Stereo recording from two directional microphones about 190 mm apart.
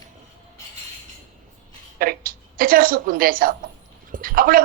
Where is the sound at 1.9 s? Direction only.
50° right (ahead or behind).